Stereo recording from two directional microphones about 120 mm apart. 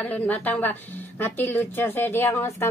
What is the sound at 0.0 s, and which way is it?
A woman's voice, 10° left (ahead or behind).